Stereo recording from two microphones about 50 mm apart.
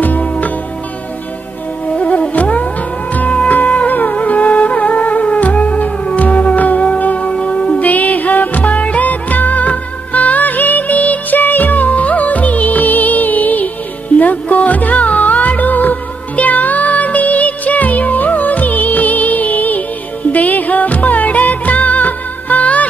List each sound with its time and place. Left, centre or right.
0.0 s music: left
2.0 s music: left
7.9 s music of bollywood: left
20.2 s music: left